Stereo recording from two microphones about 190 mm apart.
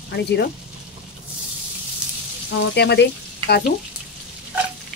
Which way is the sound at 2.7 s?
60° left (ahead or behind).